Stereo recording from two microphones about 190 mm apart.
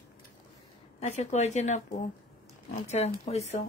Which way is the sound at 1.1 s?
35° left (ahead or behind).